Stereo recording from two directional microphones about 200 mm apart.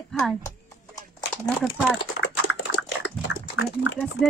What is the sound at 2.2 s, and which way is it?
Dog, 65° left (ahead or behind).